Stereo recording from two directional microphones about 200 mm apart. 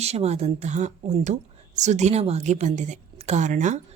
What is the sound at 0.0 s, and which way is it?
Speech, 30° right (ahead or behind).